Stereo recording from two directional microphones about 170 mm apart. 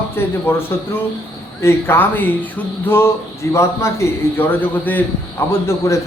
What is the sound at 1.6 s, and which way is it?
A man's voice, 15° left (ahead or behind).